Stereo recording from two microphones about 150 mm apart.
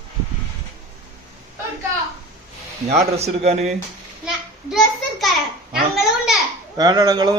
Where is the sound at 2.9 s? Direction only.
45° right (ahead or behind).